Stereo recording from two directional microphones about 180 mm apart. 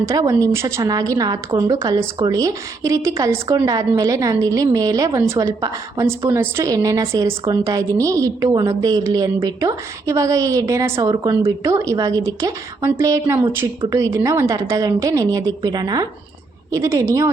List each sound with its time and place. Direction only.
0.0 s a woman's voice: 20° right (ahead or behind)